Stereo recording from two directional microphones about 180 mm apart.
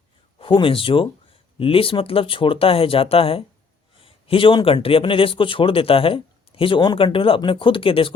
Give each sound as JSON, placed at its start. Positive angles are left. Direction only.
{"t": 0.3, "sound": "a man's voice", "side_deg": 30}